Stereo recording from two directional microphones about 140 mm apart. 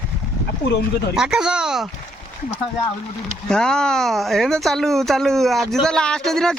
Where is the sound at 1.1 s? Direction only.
5° right (ahead or behind).